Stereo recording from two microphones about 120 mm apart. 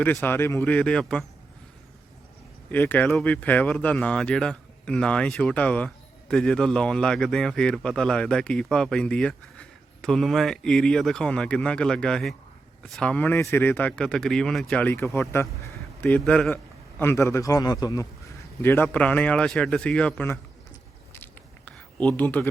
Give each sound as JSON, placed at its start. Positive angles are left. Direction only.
{"t": 0.0, "sound": "speech", "side_deg": 15}
{"t": 2.6, "sound": "speech", "side_deg": 15}
{"t": 17.0, "sound": "a man's voice", "side_deg": 20}
{"t": 18.6, "sound": "speech", "side_deg": 15}
{"t": 21.1, "sound": "a sound", "side_deg": 15}